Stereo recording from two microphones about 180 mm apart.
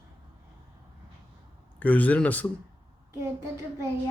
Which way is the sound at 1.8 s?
10° left (ahead or behind).